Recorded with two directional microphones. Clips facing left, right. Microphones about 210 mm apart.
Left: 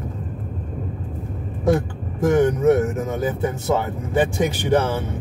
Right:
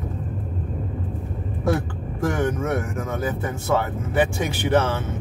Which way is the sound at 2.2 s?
15° left (ahead or behind).